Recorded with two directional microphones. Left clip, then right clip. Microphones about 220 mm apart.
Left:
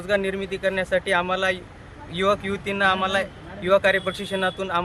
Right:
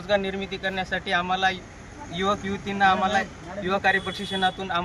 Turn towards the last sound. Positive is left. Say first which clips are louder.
# left 1 dB
turn(degrees=40)  # may be behind; listen again after turning